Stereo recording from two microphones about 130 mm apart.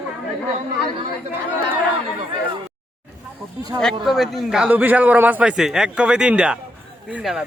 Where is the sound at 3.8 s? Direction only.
Centre (ahead or behind).